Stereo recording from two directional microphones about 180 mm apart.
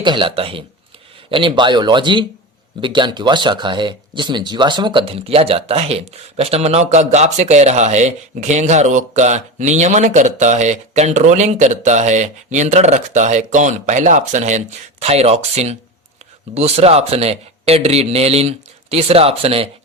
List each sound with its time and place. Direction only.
0.0 s speech: 25° right (ahead or behind)